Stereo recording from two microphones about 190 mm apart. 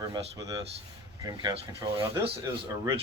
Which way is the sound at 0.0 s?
20° right (ahead or behind).